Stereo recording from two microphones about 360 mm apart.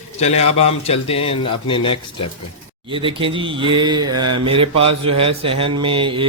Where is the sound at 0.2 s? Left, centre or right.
Centre.